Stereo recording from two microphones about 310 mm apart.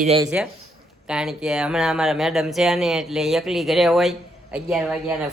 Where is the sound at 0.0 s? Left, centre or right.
Centre.